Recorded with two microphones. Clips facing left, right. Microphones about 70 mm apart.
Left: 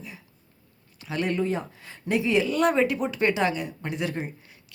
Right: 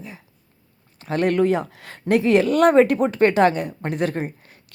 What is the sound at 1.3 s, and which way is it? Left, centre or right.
Speech, right.